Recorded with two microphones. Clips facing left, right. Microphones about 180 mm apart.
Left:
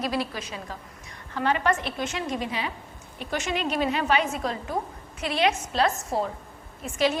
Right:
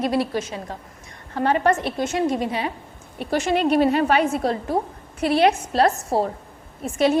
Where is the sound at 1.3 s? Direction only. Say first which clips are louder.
Right 5 dB; 40° right (ahead or behind).